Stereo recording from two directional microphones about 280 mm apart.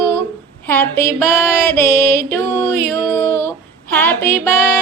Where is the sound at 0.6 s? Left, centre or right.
Centre.